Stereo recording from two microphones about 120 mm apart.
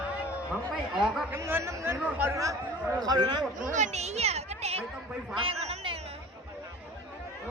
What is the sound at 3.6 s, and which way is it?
Speech, 90° right.